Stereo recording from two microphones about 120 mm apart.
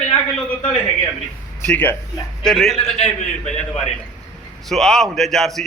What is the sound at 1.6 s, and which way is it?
Speech, 15° left (ahead or behind).